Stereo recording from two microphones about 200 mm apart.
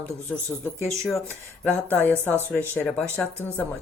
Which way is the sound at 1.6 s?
10° left (ahead or behind).